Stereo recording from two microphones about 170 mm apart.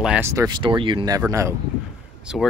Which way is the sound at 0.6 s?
30° right (ahead or behind).